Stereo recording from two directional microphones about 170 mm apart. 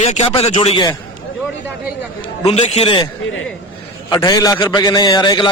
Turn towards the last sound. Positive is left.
turn(degrees=25)  # may be behind; listen again after turning